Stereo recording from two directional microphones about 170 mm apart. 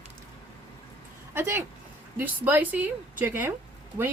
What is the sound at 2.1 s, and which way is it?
Speech, 10° right (ahead or behind).